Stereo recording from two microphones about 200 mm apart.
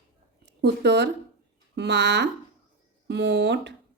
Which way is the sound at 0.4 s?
55° right (ahead or behind).